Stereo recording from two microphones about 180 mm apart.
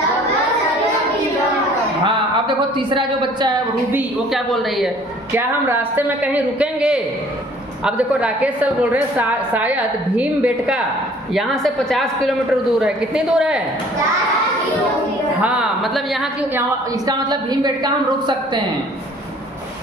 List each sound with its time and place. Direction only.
2.0 s speech: 25° right (ahead or behind)
3.9 s a woman's voice: centre (ahead or behind)
5.3 s a woman's voice: 10° right (ahead or behind)
15.4 s a woman's voice: 5° right (ahead or behind)
16.5 s a woman's voice: 20° right (ahead or behind)